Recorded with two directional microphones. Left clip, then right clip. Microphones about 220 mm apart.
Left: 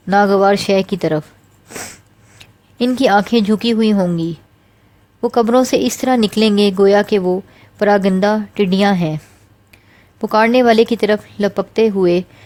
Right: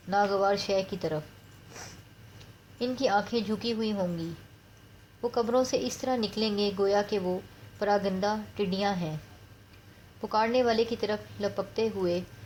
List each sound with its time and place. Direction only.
0.1 s speech: 45° left (ahead or behind)
2.7 s speech: 45° left (ahead or behind)
10.2 s speech: 45° left (ahead or behind)